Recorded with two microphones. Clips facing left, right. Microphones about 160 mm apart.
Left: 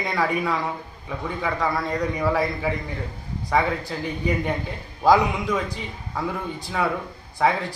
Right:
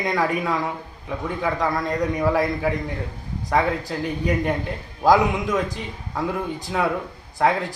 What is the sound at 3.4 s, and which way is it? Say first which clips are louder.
Speech: right 1 dB; centre (ahead or behind).